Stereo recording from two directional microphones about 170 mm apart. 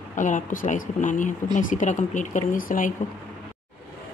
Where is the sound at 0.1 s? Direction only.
50° left (ahead or behind).